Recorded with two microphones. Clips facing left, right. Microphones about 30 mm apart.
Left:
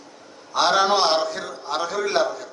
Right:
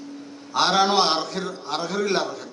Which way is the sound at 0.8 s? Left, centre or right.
Right.